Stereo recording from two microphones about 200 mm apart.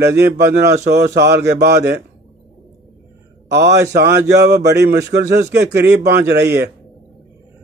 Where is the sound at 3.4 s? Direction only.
55° right (ahead or behind).